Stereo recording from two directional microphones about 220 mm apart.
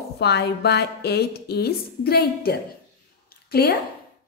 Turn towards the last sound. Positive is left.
turn(degrees=45)  # may be behind; listen again after turning